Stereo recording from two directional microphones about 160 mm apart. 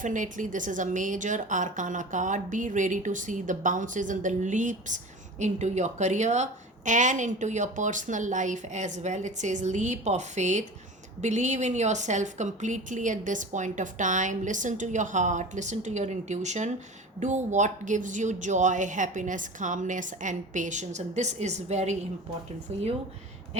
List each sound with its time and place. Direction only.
0.0 s a woman's voice: 55° right (ahead or behind)